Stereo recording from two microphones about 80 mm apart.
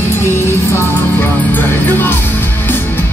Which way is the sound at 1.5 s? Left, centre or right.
Left.